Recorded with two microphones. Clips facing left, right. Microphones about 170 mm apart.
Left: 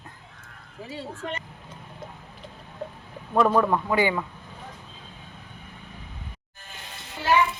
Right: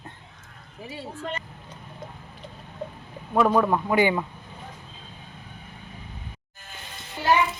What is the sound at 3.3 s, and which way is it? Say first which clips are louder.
Speech: even; 5° right (ahead or behind).